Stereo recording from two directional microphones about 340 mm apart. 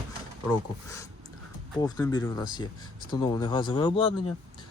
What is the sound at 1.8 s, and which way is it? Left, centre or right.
Speech, centre.